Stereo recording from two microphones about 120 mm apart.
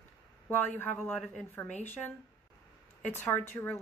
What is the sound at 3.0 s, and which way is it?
Speech, 15° left (ahead or behind).